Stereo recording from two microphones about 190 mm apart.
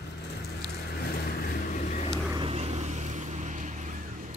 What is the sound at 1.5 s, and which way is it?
Boat, 45° left (ahead or behind).